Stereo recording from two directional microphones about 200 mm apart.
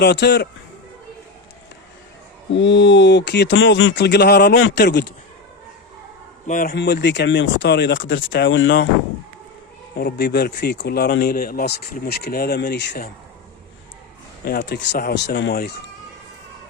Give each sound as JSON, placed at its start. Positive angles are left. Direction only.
{"t": 0.0, "sound": "speech", "side_deg": 60}
{"t": 2.6, "sound": "speech", "side_deg": 65}
{"t": 6.5, "sound": "speech", "side_deg": 45}
{"t": 6.7, "sound": "speech", "side_deg": 55}
{"t": 10.0, "sound": "speech", "side_deg": 55}
{"t": 14.4, "sound": "speech", "side_deg": 55}